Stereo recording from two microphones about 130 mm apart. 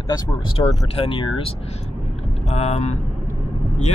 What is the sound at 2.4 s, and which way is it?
Speech, 55° left (ahead or behind).